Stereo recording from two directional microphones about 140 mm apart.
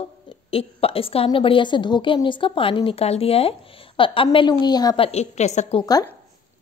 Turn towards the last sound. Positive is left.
turn(degrees=55)  # may be behind; listen again after turning